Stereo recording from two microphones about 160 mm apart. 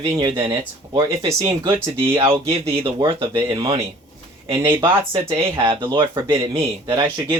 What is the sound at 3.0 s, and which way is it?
Speech, 30° right (ahead or behind).